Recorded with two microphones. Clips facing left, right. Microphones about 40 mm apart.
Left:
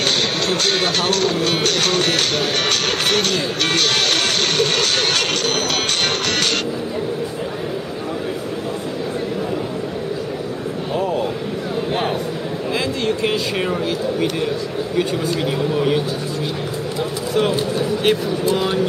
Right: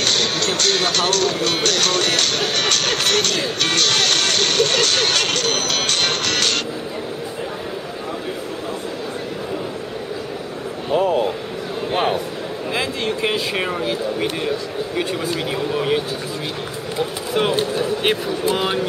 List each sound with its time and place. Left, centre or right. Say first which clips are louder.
0.5 s speech: left 1 dB; centre
10.9 s speech: right 4 dB; right
11.9 s speech: right 4 dB; centre
17.3 s speech: left 1 dB; centre